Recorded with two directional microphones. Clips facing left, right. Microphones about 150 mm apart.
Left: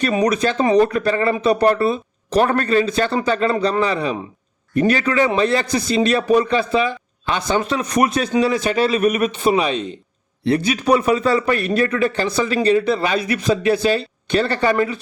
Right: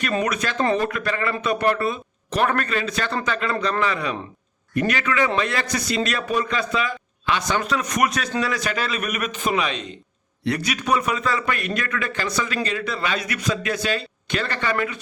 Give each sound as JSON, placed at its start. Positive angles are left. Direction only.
{"t": 0.2, "sound": "a man's voice", "side_deg": 30}